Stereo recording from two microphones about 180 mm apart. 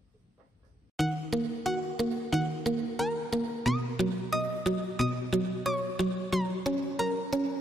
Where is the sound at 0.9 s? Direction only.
Centre (ahead or behind).